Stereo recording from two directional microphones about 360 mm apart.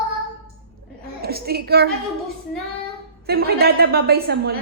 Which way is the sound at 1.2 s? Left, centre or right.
Right.